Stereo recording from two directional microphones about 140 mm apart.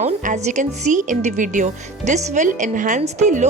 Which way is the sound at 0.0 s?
55° right (ahead or behind).